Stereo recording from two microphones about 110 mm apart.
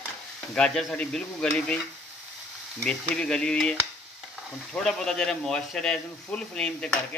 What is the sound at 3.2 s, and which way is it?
Speech, 10° left (ahead or behind).